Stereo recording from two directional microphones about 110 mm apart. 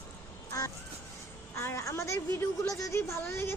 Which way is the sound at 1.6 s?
25° left (ahead or behind).